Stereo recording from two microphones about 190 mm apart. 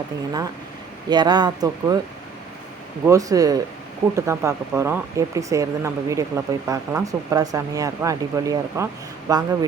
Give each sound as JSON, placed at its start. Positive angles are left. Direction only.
{"t": 1.1, "sound": "speech", "side_deg": -20}
{"t": 3.1, "sound": "speech", "side_deg": -20}